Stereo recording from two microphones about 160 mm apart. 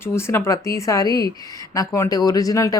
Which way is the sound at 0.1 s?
15° left (ahead or behind).